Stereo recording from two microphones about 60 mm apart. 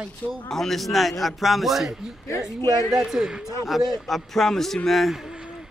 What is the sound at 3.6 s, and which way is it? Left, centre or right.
A man's voice, centre.